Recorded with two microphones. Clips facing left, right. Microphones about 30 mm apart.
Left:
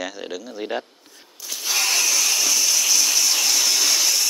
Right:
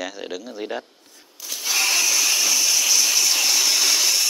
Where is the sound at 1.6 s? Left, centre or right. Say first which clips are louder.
Right 1 dB; centre.